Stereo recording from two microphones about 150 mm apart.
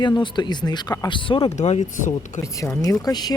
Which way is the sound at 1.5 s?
50° left (ahead or behind).